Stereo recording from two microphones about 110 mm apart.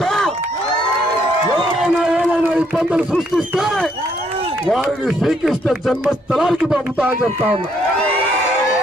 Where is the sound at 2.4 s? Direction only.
10° right (ahead or behind).